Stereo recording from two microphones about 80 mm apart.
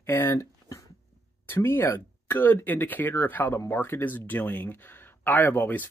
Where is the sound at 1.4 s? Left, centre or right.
Left.